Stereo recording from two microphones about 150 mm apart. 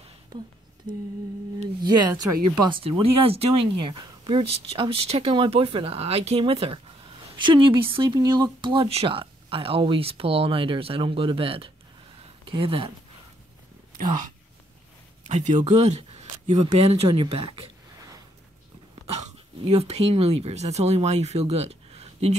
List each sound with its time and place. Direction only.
1.8 s speech: 25° right (ahead or behind)
2.8 s a woman's voice: 40° right (ahead or behind)
15.2 s speech: 55° right (ahead or behind)
19.6 s speech: 45° right (ahead or behind)